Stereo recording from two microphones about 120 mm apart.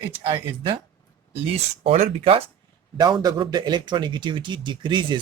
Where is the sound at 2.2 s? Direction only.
50° right (ahead or behind).